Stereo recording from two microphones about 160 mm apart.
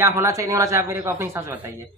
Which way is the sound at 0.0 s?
20° right (ahead or behind).